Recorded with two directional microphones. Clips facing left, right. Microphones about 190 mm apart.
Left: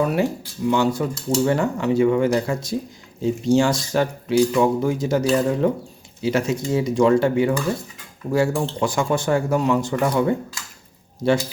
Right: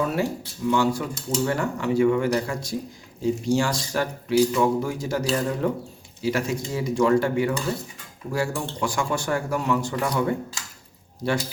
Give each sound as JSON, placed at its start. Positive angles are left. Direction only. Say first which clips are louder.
{"t": 0.0, "sound": "speech", "louder": "left 4 dB", "side_deg": 15}